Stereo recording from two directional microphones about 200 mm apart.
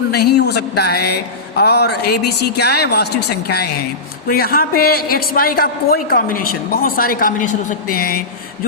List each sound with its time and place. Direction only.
0.1 s a man's voice: 55° left (ahead or behind)